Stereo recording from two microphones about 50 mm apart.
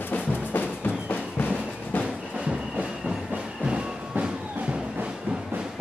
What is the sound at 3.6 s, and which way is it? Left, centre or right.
Music, right.